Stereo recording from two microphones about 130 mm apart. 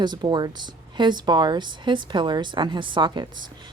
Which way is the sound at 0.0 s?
35° right (ahead or behind).